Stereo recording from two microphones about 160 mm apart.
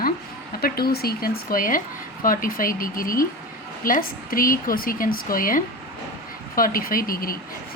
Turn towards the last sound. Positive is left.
turn(degrees=65)  # may be behind; listen again after turning